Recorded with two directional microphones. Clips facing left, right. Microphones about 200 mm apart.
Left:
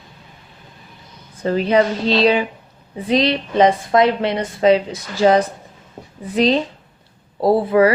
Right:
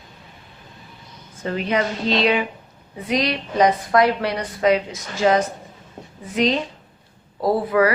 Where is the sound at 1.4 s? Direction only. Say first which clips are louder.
Left 6 dB; 35° left (ahead or behind).